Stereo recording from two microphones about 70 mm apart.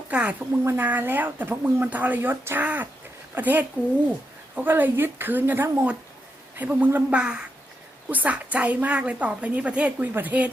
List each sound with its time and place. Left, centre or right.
0.1 s a woman's voice: centre
7.1 s a woman's voice: centre